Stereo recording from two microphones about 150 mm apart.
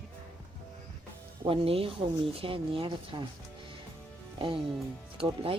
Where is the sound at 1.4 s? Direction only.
40° right (ahead or behind).